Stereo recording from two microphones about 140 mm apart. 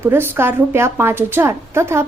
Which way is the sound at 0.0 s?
15° right (ahead or behind).